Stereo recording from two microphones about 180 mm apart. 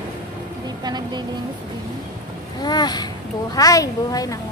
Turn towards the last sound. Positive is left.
turn(degrees=20)  # may be behind; listen again after turning